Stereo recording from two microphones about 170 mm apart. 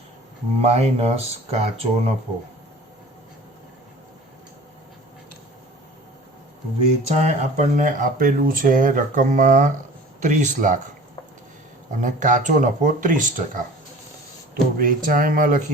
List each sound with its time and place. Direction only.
0.6 s speech: 40° right (ahead or behind)
7.1 s speech: 40° right (ahead or behind)
11.9 s speech: 50° right (ahead or behind)